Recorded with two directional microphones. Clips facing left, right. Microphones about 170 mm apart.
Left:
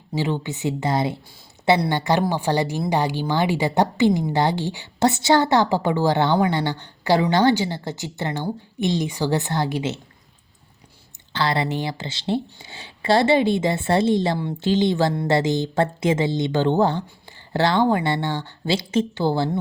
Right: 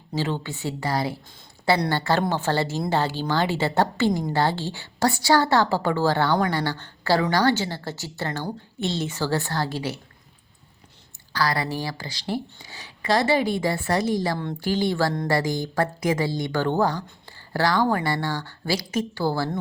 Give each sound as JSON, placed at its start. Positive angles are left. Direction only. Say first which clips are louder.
{"t": 0.2, "sound": "a woman's voice", "louder": "left 3 dB", "side_deg": 15}
{"t": 11.3, "sound": "speech", "louder": "left 2 dB", "side_deg": 25}